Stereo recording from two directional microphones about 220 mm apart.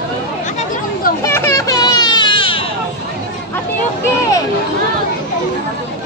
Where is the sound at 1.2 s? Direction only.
10° left (ahead or behind).